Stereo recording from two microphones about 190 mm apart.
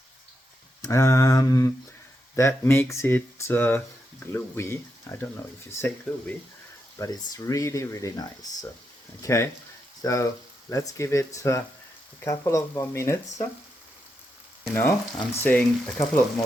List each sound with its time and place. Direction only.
0.8 s speech: 15° left (ahead or behind)
14.7 s speech: 10° left (ahead or behind)